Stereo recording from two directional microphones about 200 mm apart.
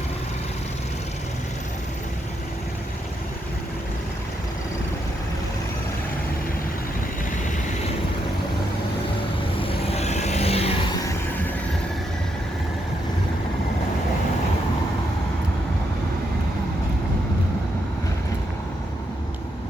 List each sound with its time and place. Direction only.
9.6 s vehicle: 30° left (ahead or behind)